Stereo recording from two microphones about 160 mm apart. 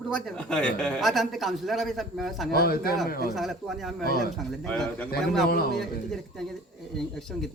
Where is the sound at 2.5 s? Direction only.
75° left (ahead or behind).